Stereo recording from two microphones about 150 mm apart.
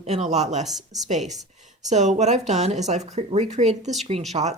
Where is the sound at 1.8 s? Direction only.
50° right (ahead or behind).